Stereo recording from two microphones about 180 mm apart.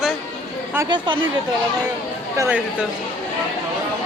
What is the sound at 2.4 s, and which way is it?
Speech, 10° right (ahead or behind).